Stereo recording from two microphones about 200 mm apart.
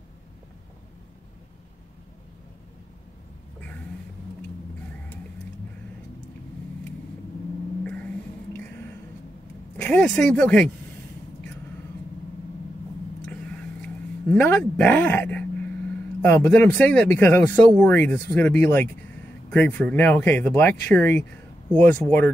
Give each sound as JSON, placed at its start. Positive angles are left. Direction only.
{"t": 7.8, "sound": "a sound", "side_deg": 5}
{"t": 9.8, "sound": "speech", "side_deg": 5}
{"t": 13.2, "sound": "whispering", "side_deg": 5}
{"t": 14.3, "sound": "speech", "side_deg": 5}